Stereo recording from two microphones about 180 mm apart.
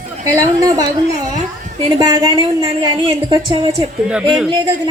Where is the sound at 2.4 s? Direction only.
30° right (ahead or behind).